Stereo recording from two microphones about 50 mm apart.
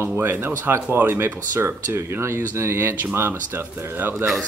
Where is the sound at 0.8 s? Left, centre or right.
Right.